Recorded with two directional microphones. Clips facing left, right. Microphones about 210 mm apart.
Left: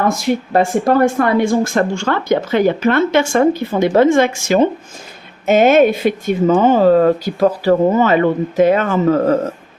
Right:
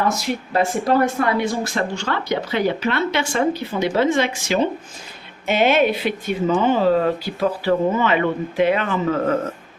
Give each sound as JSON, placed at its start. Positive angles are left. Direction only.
{"t": 0.1, "sound": "speech", "side_deg": 50}